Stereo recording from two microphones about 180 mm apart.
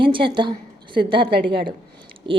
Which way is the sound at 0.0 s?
30° right (ahead or behind).